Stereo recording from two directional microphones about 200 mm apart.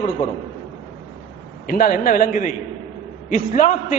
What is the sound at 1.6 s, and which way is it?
A man's voice, 40° left (ahead or behind).